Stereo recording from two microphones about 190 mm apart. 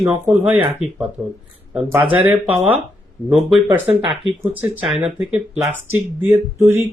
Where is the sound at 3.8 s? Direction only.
30° right (ahead or behind).